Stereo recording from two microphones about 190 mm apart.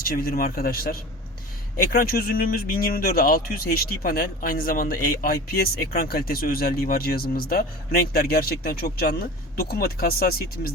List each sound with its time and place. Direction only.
0.0 s speech: 50° left (ahead or behind)